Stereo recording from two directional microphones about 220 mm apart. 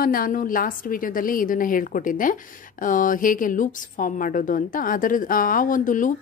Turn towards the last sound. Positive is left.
turn(degrees=35)  # may be behind; listen again after turning